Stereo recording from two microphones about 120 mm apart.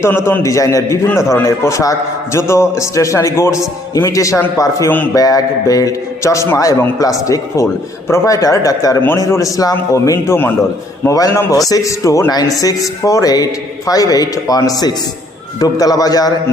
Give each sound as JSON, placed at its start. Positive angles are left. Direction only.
{"t": 0.0, "sound": "a man's voice", "side_deg": 20}